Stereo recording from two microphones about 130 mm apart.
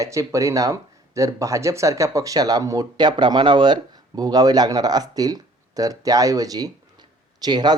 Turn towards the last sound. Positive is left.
turn(degrees=-30)  # may be behind; listen again after turning